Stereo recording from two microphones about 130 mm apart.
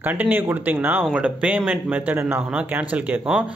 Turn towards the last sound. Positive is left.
turn(degrees=-10)  # may be behind; listen again after turning